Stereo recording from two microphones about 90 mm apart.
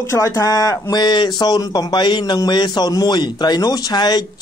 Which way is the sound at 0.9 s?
55° left (ahead or behind).